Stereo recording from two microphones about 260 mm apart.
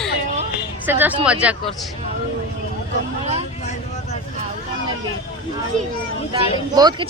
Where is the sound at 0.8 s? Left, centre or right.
Centre.